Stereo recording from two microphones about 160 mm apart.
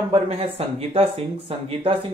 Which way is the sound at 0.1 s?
40° right (ahead or behind).